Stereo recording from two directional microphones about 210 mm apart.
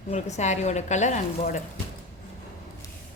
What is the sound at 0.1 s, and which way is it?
Speech, 35° left (ahead or behind).